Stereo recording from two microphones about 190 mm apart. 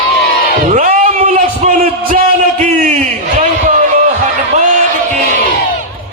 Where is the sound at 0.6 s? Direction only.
45° right (ahead or behind).